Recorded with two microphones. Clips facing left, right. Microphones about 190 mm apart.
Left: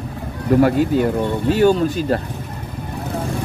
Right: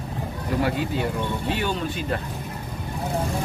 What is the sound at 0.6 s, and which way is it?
Speech, 45° left (ahead or behind).